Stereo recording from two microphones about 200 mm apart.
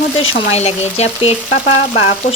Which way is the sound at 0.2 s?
30° left (ahead or behind).